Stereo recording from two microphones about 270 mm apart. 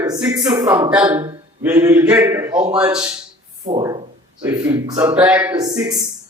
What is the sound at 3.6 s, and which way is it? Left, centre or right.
A man's voice, centre.